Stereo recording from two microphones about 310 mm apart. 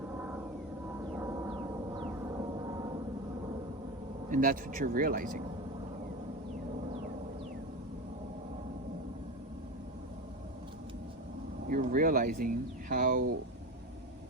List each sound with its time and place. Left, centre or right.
1.1 s a sound: centre
4.3 s speech: right
11.7 s speech: right